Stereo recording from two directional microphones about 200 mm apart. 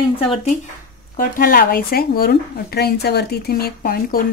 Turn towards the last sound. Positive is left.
turn(degrees=50)  # may be behind; listen again after turning